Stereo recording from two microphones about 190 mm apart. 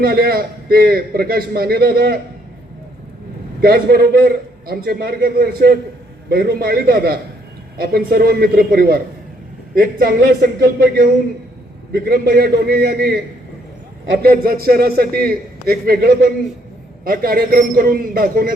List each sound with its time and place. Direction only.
0.0 s a man's voice: 55° right (ahead or behind)
3.6 s a man's voice: 55° right (ahead or behind)
14.2 s a man's voice: 50° right (ahead or behind)